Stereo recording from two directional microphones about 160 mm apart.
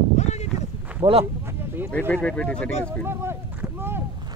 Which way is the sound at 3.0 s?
15° right (ahead or behind).